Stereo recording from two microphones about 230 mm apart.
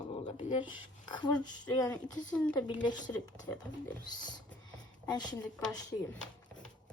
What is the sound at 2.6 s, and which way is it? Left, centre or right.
Speech, centre.